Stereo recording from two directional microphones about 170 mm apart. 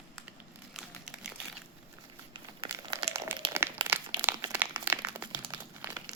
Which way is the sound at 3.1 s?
15° right (ahead or behind).